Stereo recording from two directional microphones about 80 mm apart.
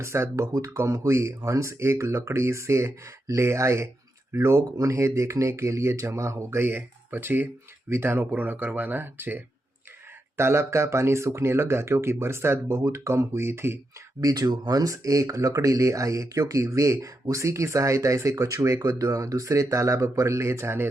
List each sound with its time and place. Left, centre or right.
0.0 s speech: right
14.2 s speech: right
14.8 s speech: right